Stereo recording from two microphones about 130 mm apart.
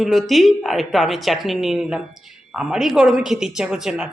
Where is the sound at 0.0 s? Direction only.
Centre (ahead or behind).